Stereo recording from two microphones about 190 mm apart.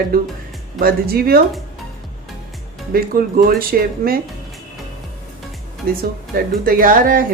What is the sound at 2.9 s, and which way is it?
Speech, 50° right (ahead or behind).